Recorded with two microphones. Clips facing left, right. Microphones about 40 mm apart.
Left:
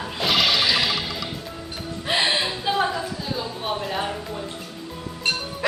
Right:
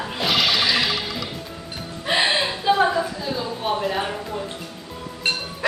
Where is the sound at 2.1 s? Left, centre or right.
Centre.